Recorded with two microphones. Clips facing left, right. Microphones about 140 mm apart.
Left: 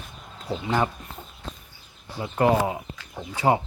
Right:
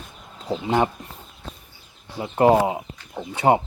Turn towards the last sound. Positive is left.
turn(degrees=-20)  # may be behind; listen again after turning